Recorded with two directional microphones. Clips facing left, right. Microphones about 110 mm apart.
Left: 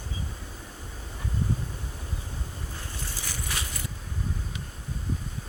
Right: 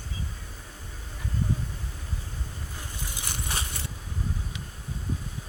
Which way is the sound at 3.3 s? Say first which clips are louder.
Right 2 dB; 25° right (ahead or behind).